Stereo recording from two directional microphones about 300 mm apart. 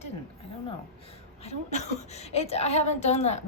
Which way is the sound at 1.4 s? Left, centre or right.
Left.